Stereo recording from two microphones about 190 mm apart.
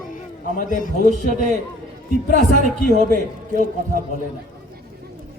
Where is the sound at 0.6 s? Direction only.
45° left (ahead or behind).